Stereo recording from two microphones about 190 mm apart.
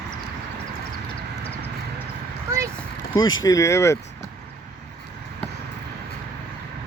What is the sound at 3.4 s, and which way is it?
Speech, 15° left (ahead or behind).